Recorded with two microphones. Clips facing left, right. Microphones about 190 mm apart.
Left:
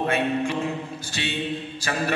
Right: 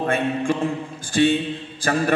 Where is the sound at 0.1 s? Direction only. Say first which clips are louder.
Right 2 dB; 50° right (ahead or behind).